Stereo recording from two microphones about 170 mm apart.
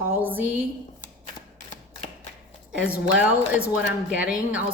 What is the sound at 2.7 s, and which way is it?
A woman's voice, 10° right (ahead or behind).